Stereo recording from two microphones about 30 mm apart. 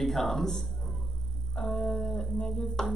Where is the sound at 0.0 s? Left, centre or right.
Centre.